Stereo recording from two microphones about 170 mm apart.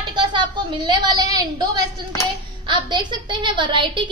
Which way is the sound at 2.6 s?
25° right (ahead or behind).